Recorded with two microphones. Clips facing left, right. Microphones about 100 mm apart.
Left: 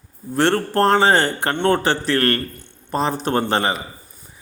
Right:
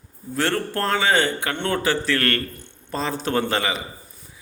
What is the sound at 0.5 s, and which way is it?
A man's voice, 30° left (ahead or behind).